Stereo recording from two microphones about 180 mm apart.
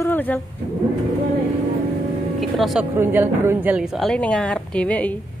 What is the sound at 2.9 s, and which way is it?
A woman's voice, 10° right (ahead or behind).